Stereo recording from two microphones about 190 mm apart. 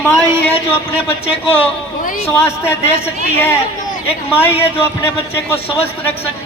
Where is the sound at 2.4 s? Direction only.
10° left (ahead or behind).